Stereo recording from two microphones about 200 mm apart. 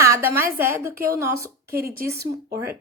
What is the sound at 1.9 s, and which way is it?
Speech, 45° right (ahead or behind).